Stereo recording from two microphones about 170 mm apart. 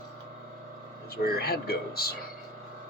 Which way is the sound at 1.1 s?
65° left (ahead or behind).